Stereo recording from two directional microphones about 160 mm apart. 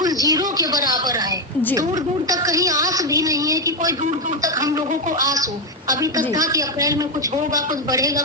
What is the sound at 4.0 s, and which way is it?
Speech, 50° right (ahead or behind).